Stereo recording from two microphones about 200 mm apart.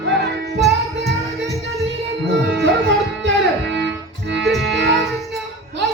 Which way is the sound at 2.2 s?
60° right (ahead or behind).